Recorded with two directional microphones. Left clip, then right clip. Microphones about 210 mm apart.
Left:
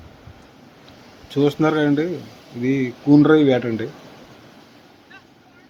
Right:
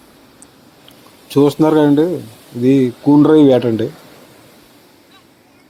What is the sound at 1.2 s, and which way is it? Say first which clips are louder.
Speech: right 6 dB; 25° right (ahead or behind).